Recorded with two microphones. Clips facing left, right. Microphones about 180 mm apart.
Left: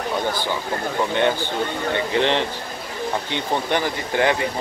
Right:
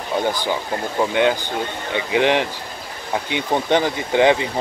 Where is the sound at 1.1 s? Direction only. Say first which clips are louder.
Right 1 dB; 15° right (ahead or behind).